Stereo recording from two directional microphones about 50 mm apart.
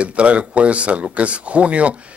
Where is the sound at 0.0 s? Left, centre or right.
Right.